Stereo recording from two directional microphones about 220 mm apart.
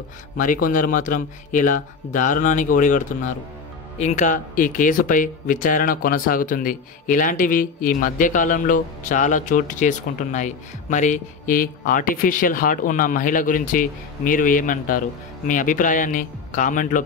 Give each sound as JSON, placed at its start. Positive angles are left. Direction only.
{"t": 0.4, "sound": "speech", "side_deg": 35}